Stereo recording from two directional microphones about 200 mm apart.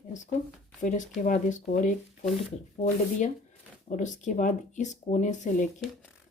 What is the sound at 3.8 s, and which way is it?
Speech, 40° left (ahead or behind).